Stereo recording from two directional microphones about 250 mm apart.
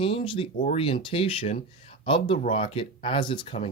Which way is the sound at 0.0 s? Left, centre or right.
Left.